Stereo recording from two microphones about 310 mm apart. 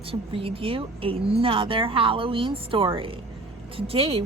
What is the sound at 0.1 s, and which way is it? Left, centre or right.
Speech, centre.